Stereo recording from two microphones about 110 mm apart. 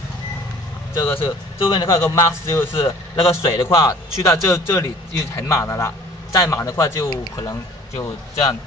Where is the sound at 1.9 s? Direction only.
25° left (ahead or behind).